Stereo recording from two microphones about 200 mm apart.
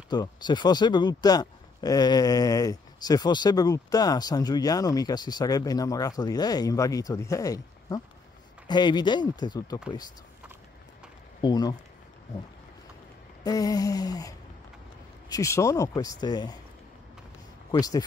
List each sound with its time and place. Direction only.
0.1 s speech: 20° left (ahead or behind)
11.4 s speech: 20° left (ahead or behind)
13.4 s speech: 20° left (ahead or behind)
17.6 s speech: 20° left (ahead or behind)